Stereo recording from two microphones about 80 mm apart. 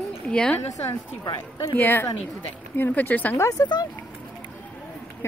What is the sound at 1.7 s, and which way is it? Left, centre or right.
Speech, left.